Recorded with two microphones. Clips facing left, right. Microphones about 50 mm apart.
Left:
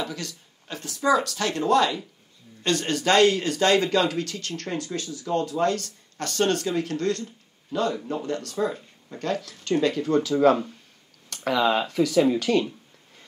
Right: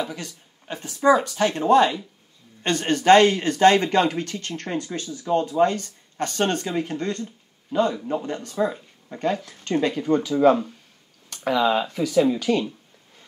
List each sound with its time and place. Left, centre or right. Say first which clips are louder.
0.0 s speech: right 2 dB; centre